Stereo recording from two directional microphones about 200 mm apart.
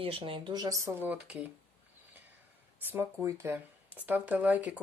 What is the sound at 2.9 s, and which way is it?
Speech, 10° right (ahead or behind).